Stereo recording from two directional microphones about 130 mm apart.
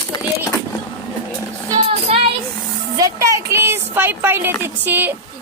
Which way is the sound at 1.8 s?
50° right (ahead or behind).